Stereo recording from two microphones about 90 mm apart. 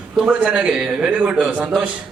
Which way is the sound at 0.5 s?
5° right (ahead or behind).